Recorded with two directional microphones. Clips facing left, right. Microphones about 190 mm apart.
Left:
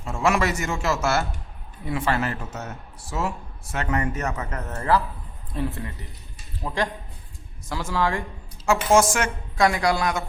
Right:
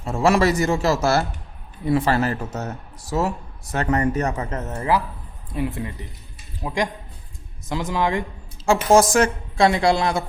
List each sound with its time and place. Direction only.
0.0 s a woman's voice: 35° right (ahead or behind); by 8.2 s 20° right (ahead or behind)
8.6 s a woman's voice: 35° right (ahead or behind)